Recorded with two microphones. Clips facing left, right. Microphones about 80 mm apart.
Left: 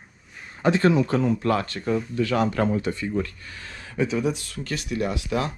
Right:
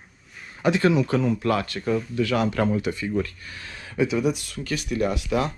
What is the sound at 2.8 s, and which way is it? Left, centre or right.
Speech, centre.